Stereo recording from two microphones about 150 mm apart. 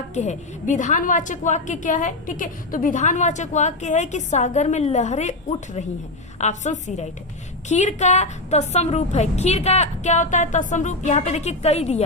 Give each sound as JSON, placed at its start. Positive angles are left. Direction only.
{"t": 0.1, "sound": "a woman's voice", "side_deg": 50}